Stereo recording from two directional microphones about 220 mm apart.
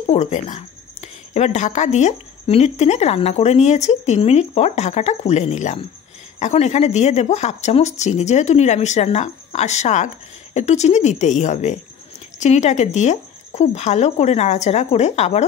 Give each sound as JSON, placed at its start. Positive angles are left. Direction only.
{"t": 0.0, "sound": "speech", "side_deg": 30}